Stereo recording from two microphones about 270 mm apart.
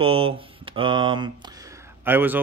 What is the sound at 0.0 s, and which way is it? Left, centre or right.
Speech, centre.